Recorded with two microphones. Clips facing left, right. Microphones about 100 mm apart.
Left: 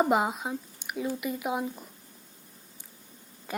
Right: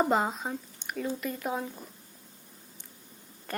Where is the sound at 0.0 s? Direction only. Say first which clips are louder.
Left 1 dB; 10° left (ahead or behind).